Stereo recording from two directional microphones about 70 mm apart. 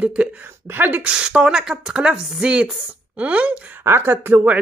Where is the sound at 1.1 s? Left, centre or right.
Centre.